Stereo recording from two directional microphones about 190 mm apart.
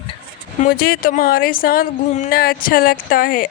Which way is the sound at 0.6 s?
50° left (ahead or behind).